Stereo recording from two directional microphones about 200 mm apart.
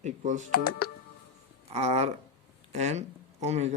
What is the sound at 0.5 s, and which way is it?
Speech, 50° left (ahead or behind).